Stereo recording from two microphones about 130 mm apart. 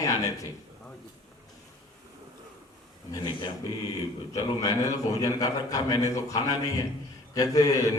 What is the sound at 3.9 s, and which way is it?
A man's voice, 25° left (ahead or behind).